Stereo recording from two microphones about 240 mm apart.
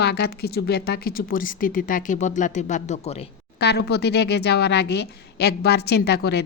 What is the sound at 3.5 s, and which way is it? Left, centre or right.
Speech, left.